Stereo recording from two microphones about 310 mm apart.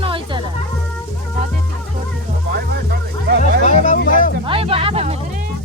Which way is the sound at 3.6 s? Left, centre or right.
Left.